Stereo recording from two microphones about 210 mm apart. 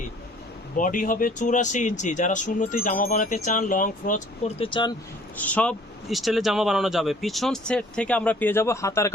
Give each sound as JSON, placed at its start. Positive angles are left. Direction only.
{"t": 0.8, "sound": "speech", "side_deg": 40}
{"t": 5.4, "sound": "speech", "side_deg": 5}